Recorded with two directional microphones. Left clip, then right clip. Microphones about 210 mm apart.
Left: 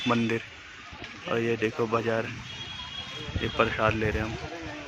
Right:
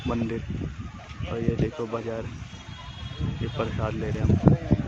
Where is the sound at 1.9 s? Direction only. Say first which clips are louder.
Left 4 dB; 10° left (ahead or behind).